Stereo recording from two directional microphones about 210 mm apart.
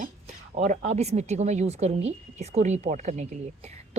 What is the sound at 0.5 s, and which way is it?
A woman's voice, 35° right (ahead or behind).